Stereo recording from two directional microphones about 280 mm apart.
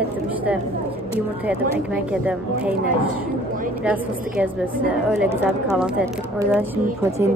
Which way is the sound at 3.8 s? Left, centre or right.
Centre.